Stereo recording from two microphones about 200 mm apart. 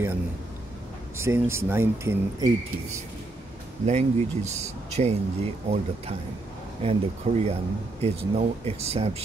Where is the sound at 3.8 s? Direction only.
35° right (ahead or behind).